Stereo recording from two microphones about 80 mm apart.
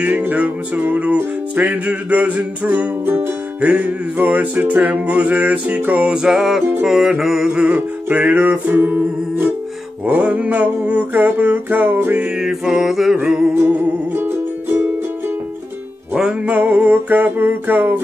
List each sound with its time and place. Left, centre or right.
0.0 s music: right; by 7.6 s centre
7.6 s music: centre
12.4 s music: centre
13.7 s music: right
16.4 s music: right